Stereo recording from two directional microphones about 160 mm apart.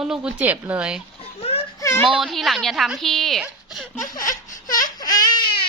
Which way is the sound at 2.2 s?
Centre (ahead or behind).